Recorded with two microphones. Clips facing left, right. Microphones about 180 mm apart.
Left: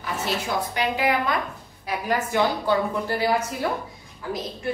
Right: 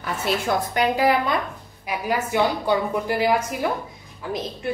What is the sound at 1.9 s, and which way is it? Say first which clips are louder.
A woman's voice: right 1 dB; 10° right (ahead or behind).